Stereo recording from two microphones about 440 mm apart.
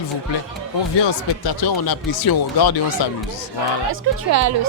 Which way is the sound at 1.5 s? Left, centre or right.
Left.